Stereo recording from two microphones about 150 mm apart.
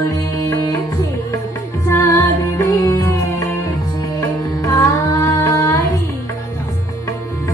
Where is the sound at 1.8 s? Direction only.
15° left (ahead or behind).